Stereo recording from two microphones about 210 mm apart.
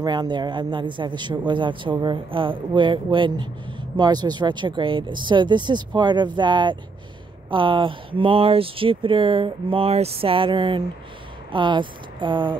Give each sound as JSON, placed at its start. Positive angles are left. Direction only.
{"t": 0.0, "sound": "speech", "side_deg": -20}